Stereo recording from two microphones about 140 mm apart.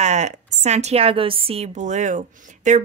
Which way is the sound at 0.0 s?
55° right (ahead or behind).